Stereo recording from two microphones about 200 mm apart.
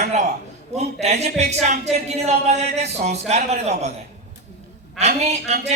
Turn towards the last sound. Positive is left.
turn(degrees=-35)  # may be behind; listen again after turning